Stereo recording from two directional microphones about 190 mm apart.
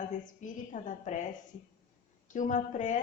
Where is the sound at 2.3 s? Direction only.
40° left (ahead or behind).